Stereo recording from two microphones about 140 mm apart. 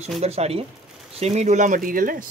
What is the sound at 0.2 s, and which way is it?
Speech, 50° right (ahead or behind).